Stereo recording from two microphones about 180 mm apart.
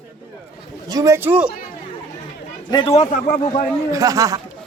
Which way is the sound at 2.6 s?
25° left (ahead or behind).